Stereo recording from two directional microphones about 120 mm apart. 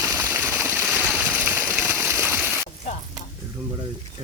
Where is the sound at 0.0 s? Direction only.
25° right (ahead or behind).